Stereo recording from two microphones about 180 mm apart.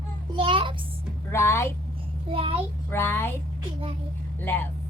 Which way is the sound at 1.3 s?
15° left (ahead or behind).